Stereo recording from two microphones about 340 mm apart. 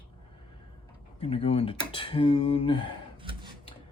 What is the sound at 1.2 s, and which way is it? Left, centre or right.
Speech, centre.